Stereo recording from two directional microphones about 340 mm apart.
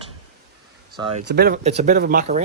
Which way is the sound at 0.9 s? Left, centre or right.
Centre.